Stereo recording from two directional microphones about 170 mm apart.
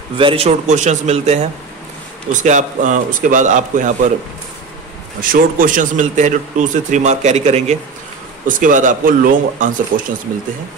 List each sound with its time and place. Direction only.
0.2 s a man's voice: 35° right (ahead or behind)
5.2 s a man's voice: 55° right (ahead or behind)
8.5 s a man's voice: 50° right (ahead or behind)